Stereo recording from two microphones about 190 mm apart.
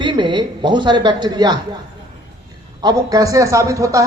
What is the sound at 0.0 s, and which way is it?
Speech, 25° right (ahead or behind).